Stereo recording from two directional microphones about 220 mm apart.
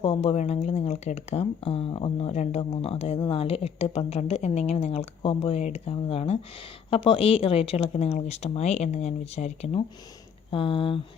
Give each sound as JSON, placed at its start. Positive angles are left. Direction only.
{"t": 0.0, "sound": "speech", "side_deg": 25}